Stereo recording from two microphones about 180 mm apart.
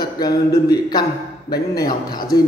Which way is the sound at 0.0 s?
20° left (ahead or behind).